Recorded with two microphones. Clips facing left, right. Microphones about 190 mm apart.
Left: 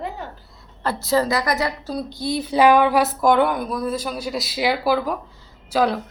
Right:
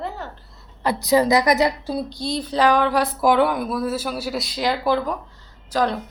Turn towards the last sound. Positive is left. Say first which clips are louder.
# left 2 dB
turn(degrees=10)  # may be behind; listen again after turning